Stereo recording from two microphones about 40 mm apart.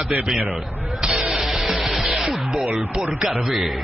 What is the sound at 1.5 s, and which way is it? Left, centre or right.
Music, centre.